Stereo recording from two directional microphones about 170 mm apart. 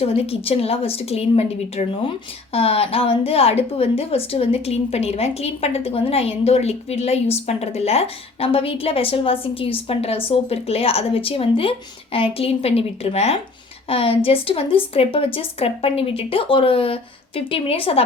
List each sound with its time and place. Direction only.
0.0 s a woman's voice: 35° left (ahead or behind)